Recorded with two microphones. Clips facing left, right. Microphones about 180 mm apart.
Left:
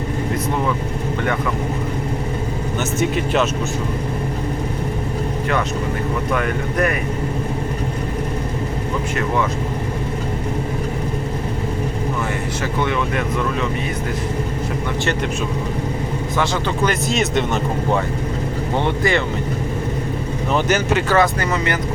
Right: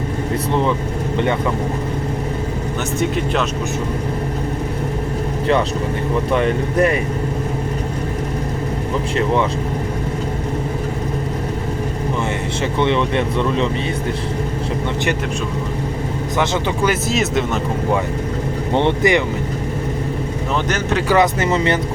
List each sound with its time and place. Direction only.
6.3 s speech: 25° right (ahead or behind)
12.8 s speech: 25° right (ahead or behind)
16.8 s speech: 5° right (ahead or behind)
18.8 s speech: 20° right (ahead or behind)
20.7 s speech: 5° left (ahead or behind)
21.1 s speech: 20° right (ahead or behind)